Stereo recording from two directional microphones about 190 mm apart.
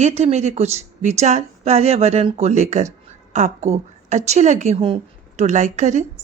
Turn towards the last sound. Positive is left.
turn(degrees=-40)  # may be behind; listen again after turning